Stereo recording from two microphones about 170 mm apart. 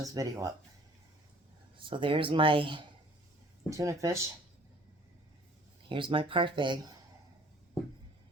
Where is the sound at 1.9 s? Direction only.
30° right (ahead or behind).